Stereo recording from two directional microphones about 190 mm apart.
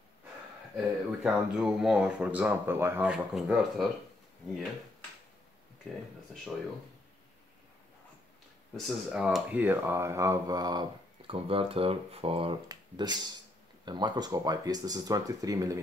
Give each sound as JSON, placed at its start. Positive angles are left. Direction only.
{"t": 0.7, "sound": "speech", "side_deg": -5}
{"t": 8.7, "sound": "speech", "side_deg": 0}